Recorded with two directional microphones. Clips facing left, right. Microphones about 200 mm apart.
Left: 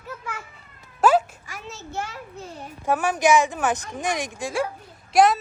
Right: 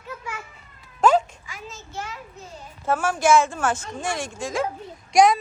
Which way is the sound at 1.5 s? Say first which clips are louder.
Left 3 dB; 65° left (ahead or behind).